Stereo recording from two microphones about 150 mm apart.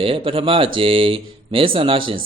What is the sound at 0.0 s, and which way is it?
A man's voice, 35° right (ahead or behind).